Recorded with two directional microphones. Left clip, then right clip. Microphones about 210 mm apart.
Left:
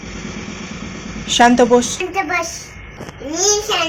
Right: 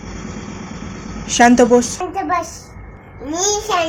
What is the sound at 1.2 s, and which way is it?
Speech, 15° right (ahead or behind).